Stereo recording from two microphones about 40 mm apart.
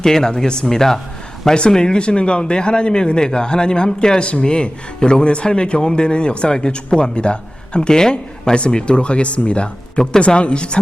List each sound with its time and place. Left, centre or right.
0.0 s speech: centre
1.7 s a man's voice: left